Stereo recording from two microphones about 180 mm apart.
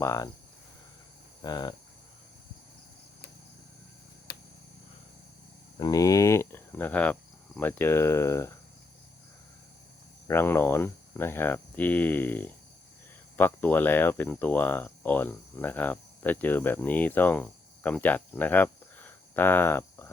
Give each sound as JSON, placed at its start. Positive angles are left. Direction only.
{"t": 0.0, "sound": "speech", "side_deg": 15}
{"t": 1.4, "sound": "speech", "side_deg": 25}
{"t": 5.8, "sound": "speech", "side_deg": 20}
{"t": 10.2, "sound": "speech", "side_deg": 15}